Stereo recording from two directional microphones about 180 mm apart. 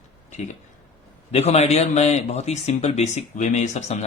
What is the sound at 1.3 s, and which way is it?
A man's voice, 35° left (ahead or behind).